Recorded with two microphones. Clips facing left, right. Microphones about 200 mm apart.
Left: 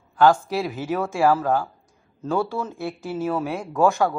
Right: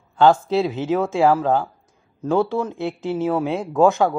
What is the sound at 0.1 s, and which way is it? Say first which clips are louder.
Speech: right 2 dB; 25° right (ahead or behind).